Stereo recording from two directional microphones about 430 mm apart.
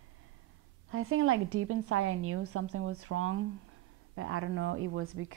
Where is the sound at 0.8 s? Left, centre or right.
Right.